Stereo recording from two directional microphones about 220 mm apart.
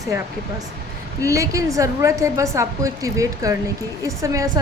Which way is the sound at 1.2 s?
15° right (ahead or behind).